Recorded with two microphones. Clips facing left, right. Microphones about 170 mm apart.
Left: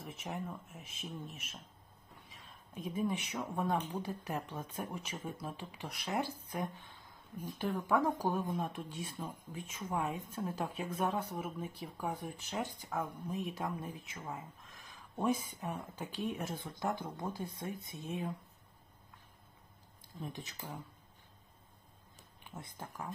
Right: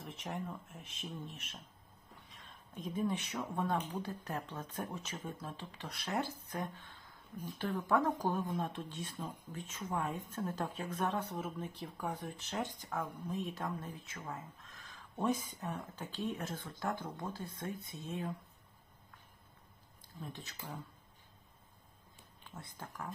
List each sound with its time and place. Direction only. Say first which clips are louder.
0.0 s speech: even; 5° left (ahead or behind)
20.3 s speech: left 3 dB; 15° left (ahead or behind)
22.4 s speech: left 2 dB; 15° left (ahead or behind)